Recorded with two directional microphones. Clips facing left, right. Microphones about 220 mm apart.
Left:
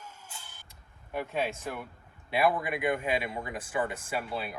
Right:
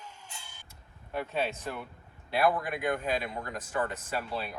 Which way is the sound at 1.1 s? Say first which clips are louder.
Even; 10° left (ahead or behind).